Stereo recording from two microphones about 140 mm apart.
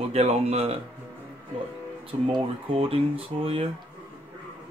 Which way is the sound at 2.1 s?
40° right (ahead or behind).